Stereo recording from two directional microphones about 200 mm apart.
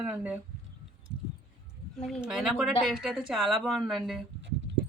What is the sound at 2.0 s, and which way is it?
Speech, centre (ahead or behind).